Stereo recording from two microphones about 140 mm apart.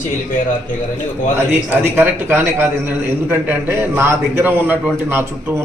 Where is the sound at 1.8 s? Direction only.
15° right (ahead or behind).